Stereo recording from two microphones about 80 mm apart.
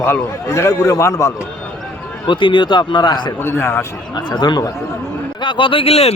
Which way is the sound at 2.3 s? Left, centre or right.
Left.